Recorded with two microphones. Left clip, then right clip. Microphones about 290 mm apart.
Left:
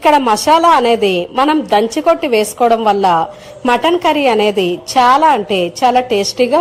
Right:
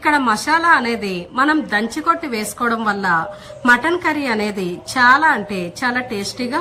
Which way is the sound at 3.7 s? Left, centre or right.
Right.